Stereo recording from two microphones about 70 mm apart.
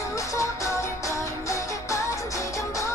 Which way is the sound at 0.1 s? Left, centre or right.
Left.